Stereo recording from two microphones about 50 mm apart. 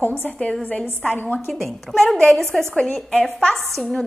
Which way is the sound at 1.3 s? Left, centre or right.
Centre.